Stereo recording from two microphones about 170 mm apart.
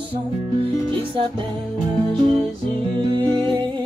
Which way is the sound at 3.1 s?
25° right (ahead or behind).